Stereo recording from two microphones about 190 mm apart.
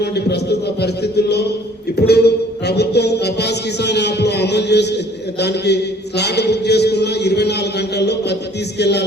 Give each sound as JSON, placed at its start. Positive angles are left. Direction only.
{"t": 0.0, "sound": "music", "side_deg": 60}